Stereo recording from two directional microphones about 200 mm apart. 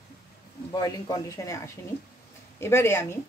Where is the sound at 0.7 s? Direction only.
20° left (ahead or behind).